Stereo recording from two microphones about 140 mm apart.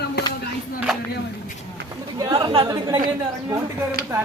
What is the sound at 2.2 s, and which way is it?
Speech, 30° right (ahead or behind).